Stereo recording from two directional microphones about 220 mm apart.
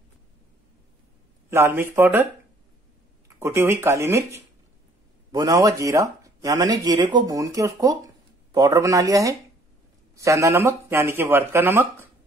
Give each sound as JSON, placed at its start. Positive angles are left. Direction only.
{"t": 1.5, "sound": "speech", "side_deg": -10}
{"t": 3.3, "sound": "speech", "side_deg": -10}